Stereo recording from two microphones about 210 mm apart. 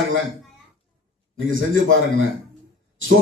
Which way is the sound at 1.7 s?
70° right (ahead or behind).